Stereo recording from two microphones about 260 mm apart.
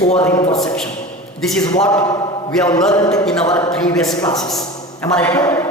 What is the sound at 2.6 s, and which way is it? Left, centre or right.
Speech, centre.